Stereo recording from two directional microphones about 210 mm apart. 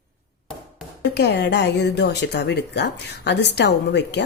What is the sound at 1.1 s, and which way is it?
Speech, 50° left (ahead or behind).